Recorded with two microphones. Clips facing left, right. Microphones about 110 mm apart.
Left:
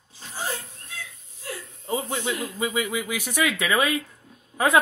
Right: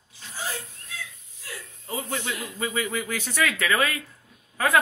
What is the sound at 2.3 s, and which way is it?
Speech, 15° left (ahead or behind).